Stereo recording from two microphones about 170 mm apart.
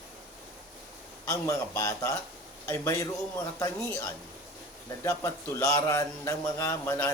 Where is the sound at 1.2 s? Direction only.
15° left (ahead or behind).